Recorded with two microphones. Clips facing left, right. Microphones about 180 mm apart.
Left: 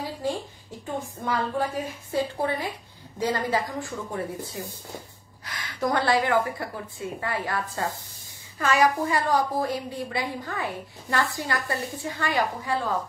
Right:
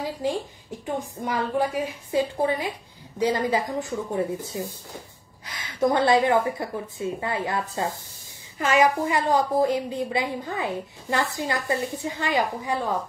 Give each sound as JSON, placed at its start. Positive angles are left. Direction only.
{"t": 0.8, "sound": "a woman's voice", "side_deg": -15}